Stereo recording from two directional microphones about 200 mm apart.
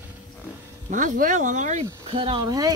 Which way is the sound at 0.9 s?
40° right (ahead or behind).